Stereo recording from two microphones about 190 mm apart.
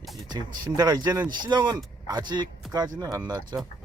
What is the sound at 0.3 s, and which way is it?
Speech, 20° right (ahead or behind).